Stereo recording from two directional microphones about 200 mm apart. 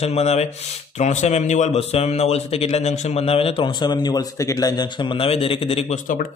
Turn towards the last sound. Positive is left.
turn(degrees=30)  # may be behind; listen again after turning